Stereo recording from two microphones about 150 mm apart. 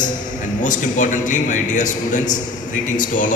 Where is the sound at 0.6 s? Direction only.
60° left (ahead or behind).